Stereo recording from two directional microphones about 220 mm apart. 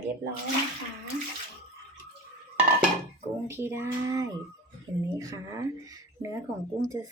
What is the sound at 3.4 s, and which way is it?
Speech, 10° right (ahead or behind).